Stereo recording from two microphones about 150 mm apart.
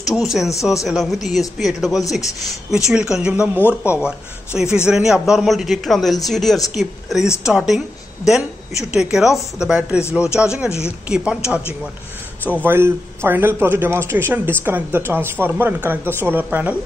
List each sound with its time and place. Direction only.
0.0 s a man's voice: centre (ahead or behind)
3.6 s speech: 15° left (ahead or behind)
4.7 s a man's voice: 5° right (ahead or behind)
12.6 s speech: 15° right (ahead or behind)